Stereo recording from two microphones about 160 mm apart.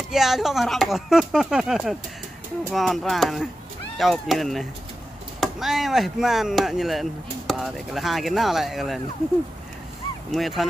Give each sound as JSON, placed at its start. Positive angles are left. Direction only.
{"t": 0.1, "sound": "speech", "side_deg": 0}
{"t": 10.3, "sound": "speech", "side_deg": 0}